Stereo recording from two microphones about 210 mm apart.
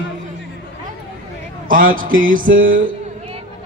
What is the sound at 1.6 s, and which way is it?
A man's voice, 40° right (ahead or behind).